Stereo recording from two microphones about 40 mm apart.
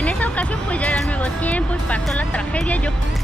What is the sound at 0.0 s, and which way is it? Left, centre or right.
Music, left.